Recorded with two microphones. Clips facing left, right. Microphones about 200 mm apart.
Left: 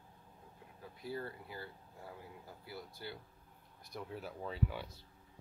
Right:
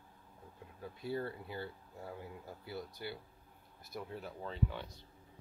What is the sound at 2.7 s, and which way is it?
Speech, 15° right (ahead or behind).